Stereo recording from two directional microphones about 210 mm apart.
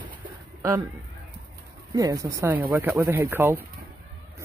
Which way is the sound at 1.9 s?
15° right (ahead or behind).